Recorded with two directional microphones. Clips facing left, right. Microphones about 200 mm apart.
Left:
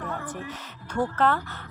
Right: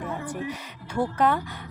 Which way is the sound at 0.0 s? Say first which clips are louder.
Right 3 dB; 10° right (ahead or behind).